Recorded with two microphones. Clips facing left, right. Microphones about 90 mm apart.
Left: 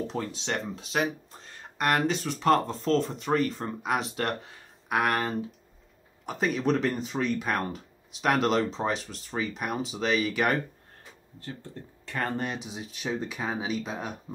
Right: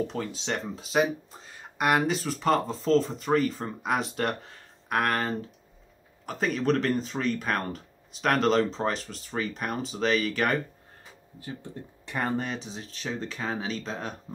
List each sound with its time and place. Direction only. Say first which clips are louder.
0.0 s speech: right 1 dB; centre (ahead or behind)
11.4 s speech: right 2 dB; 15° right (ahead or behind)
12.4 s speech: even; 5° left (ahead or behind)